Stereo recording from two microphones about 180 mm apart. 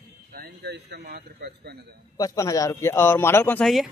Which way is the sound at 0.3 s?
60° right (ahead or behind).